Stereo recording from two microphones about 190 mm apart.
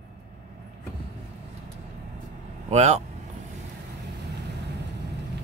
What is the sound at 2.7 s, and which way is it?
Speech, 35° right (ahead or behind).